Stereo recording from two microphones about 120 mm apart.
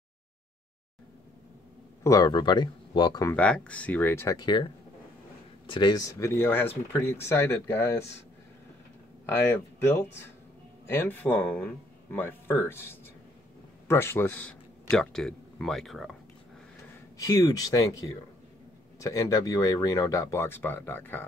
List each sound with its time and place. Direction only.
2.0 s speech: 35° left (ahead or behind)
3.3 s speech: 10° left (ahead or behind)
4.4 s speech: 40° left (ahead or behind)
5.7 s speech: 40° left (ahead or behind); by 8.1 s 20° left (ahead or behind)
9.3 s speech: 20° left (ahead or behind); by 16.2 s centre (ahead or behind)
17.2 s speech: 30° left (ahead or behind)